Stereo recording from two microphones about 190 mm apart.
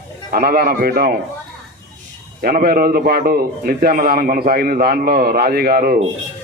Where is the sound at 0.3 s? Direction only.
50° right (ahead or behind).